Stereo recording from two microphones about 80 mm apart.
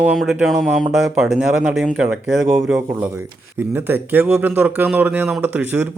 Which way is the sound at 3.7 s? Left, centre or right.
Right.